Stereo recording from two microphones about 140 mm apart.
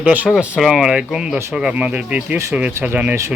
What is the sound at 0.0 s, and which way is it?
Speech, 10° right (ahead or behind).